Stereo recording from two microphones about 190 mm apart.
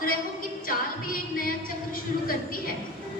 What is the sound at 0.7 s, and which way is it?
Music, 50° left (ahead or behind).